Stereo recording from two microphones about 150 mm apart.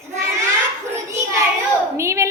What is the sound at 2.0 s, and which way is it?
Speech, 20° right (ahead or behind).